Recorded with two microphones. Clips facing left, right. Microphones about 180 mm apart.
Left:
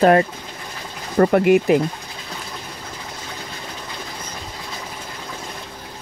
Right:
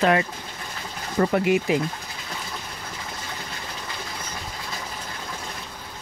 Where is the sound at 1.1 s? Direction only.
55° left (ahead or behind).